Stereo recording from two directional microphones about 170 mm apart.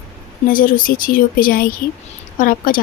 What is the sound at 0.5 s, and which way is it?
Speech, 55° left (ahead or behind).